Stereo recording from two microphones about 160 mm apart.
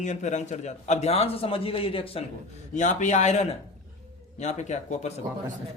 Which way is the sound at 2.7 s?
50° left (ahead or behind).